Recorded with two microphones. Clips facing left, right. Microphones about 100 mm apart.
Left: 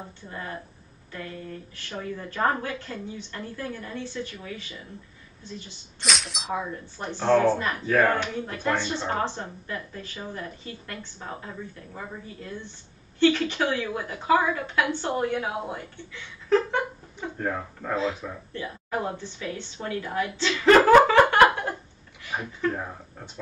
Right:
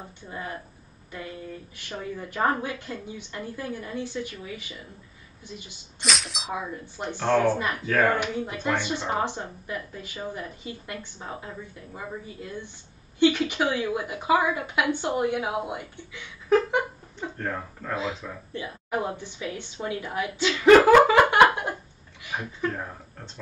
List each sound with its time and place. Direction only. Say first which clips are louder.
0.3 s a woman's voice: right 1 dB; 15° right (ahead or behind)
1.8 s a woman's voice: even; 15° right (ahead or behind)
5.9 s a sound: even; centre (ahead or behind)
7.0 s a woman's voice: left 2 dB; 15° right (ahead or behind)
13.2 s a woman's voice: even; 10° right (ahead or behind)
17.4 s speech: left 4 dB; 10° left (ahead or behind)
17.9 s a woman's voice: left 3 dB; 15° right (ahead or behind)